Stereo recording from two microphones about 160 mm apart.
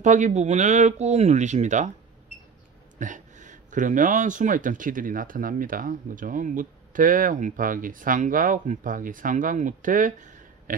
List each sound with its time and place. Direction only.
0.0 s speech: 50° right (ahead or behind)
3.0 s speech: 50° right (ahead or behind)